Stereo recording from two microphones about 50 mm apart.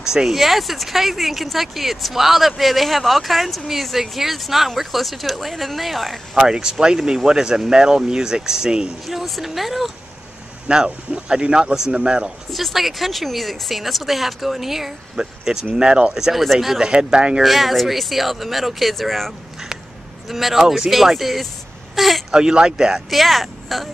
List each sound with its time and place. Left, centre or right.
0.0 s speech: centre
6.3 s speech: centre
9.0 s speech: centre
10.7 s speech: centre
12.4 s speech: centre
16.9 s speech: centre
17.4 s speech: centre
22.3 s speech: centre
23.0 s speech: centre